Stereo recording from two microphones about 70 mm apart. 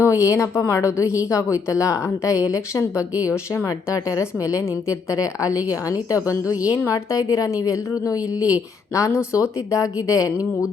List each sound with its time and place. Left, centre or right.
0.0 s a woman's voice: left